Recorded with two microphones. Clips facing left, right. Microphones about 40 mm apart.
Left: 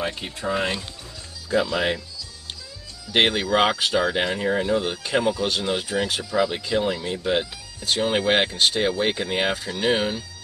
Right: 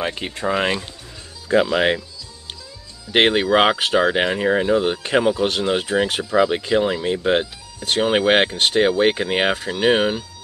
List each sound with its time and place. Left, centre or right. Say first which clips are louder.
0.1 s speech: right 4 dB; right
1.5 s speech: right 5 dB; right
3.3 s speech: right 5 dB; right